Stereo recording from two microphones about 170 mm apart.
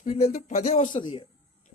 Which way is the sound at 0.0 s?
40° left (ahead or behind).